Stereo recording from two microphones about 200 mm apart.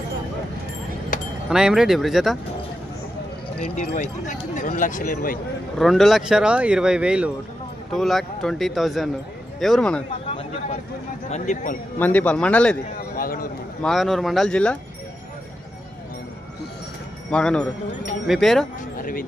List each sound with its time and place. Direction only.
1.5 s speech: 5° right (ahead or behind)
3.7 s speech: 35° left (ahead or behind)
5.8 s speech: centre (ahead or behind)
11.2 s speech: 35° left (ahead or behind)
12.0 s a man's voice: 10° left (ahead or behind)
13.1 s a sound: 45° left (ahead or behind)
13.8 s speech: centre (ahead or behind)
17.3 s speech: 5° left (ahead or behind)
18.9 s speech: 45° left (ahead or behind)